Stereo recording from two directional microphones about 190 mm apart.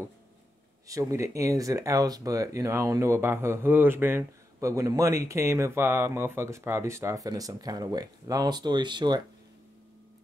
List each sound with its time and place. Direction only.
0.8 s speech: 15° right (ahead or behind)